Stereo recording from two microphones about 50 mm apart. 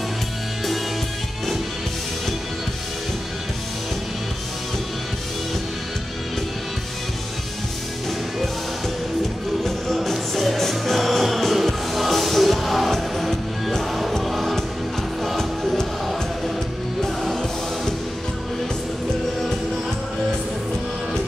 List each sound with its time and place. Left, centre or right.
9.7 s music: centre